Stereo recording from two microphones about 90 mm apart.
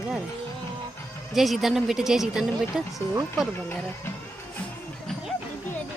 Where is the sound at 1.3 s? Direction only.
Centre (ahead or behind).